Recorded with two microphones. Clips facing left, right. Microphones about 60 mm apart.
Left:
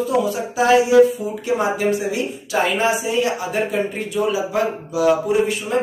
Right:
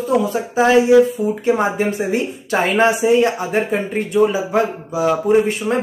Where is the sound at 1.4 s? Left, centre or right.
Right.